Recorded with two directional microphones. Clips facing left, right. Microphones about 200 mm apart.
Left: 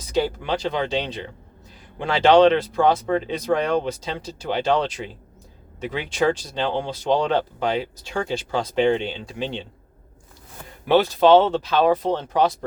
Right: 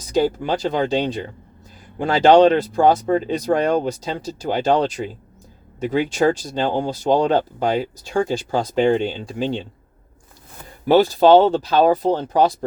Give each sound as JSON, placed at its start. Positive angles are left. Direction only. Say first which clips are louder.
{"t": 0.1, "sound": "speech", "louder": "right 4 dB", "side_deg": -40}
{"t": 10.8, "sound": "speech", "louder": "right 3 dB", "side_deg": -40}